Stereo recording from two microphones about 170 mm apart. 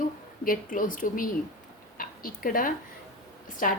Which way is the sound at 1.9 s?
55° left (ahead or behind).